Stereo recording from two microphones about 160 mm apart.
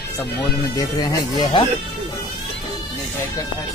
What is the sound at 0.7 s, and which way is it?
Speech, 25° left (ahead or behind).